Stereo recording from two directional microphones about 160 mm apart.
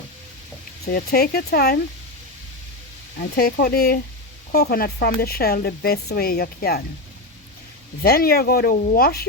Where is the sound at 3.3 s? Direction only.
75° left (ahead or behind).